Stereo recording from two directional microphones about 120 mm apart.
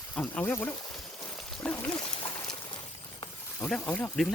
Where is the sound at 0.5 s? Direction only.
15° left (ahead or behind).